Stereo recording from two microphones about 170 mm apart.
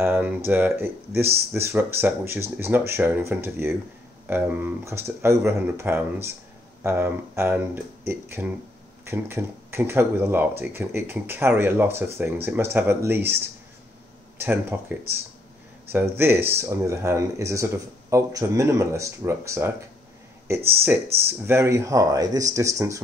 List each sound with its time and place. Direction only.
0.0 s speech: 10° right (ahead or behind)
14.4 s speech: 10° right (ahead or behind)
15.9 s speech: 10° right (ahead or behind)